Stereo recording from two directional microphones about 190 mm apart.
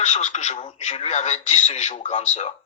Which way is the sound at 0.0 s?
40° left (ahead or behind).